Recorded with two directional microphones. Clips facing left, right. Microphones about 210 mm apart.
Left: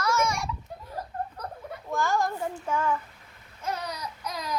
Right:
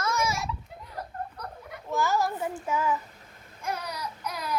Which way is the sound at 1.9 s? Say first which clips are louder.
Even; 5° right (ahead or behind).